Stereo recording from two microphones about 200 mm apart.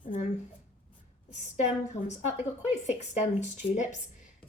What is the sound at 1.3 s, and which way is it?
Speech, 35° left (ahead or behind).